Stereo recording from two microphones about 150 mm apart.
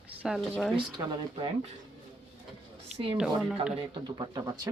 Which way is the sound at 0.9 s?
30° right (ahead or behind).